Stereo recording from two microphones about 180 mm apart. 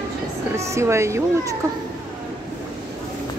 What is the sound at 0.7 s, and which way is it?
Speech, 15° right (ahead or behind).